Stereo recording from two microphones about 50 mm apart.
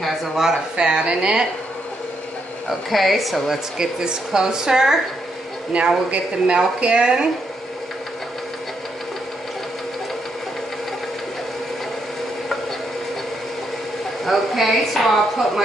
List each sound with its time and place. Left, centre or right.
0.0 s a woman's voice: centre
2.7 s a woman's voice: centre
3.7 s a woman's voice: centre
6.0 s speech: right
14.2 s a woman's voice: centre